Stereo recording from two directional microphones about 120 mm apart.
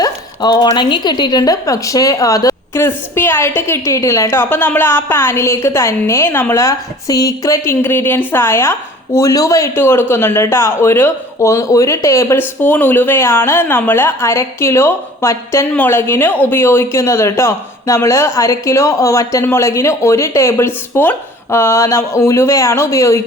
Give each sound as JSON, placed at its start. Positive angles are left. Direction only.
{"t": 0.0, "sound": "a woman's voice", "side_deg": 35}